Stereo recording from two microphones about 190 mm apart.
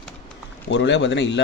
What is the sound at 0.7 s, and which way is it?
Speech, 70° left (ahead or behind).